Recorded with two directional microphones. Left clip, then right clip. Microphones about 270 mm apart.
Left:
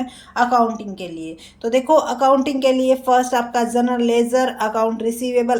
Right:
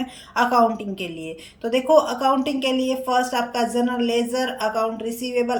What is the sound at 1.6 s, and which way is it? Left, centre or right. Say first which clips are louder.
A woman's voice: left 2 dB; centre.